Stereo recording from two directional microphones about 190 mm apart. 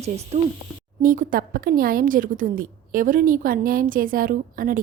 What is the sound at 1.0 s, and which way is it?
A woman's voice, 45° right (ahead or behind).